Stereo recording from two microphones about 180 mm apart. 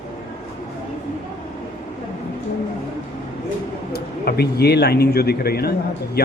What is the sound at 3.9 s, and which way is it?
Speech, 60° left (ahead or behind).